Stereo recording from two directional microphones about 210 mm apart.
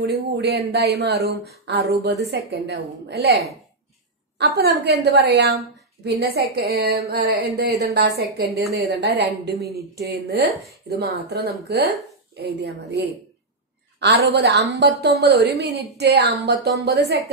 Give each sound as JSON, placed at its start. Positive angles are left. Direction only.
{"t": 0.0, "sound": "speech", "side_deg": -50}
{"t": 4.4, "sound": "speech", "side_deg": -50}